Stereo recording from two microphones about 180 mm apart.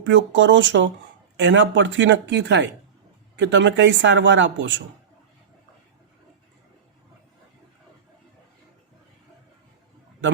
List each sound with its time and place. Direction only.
0.0 s speech: 90° right